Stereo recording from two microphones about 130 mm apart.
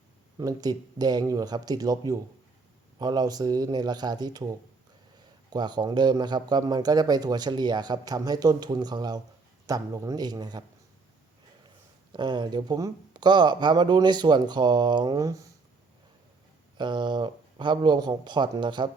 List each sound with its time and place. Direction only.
0.3 s speech: 30° right (ahead or behind)
12.1 s speech: 35° right (ahead or behind)
16.7 s speech: 35° right (ahead or behind)